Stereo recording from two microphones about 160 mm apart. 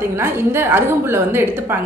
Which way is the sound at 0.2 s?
15° right (ahead or behind).